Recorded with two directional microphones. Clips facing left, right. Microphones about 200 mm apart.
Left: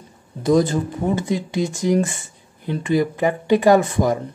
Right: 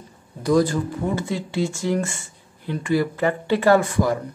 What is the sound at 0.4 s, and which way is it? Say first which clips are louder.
Speech: left 2 dB; 20° left (ahead or behind).